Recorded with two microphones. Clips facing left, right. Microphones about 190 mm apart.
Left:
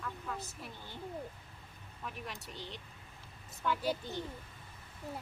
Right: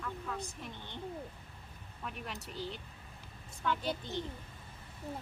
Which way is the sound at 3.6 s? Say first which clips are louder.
Left 1 dB; 10° left (ahead or behind).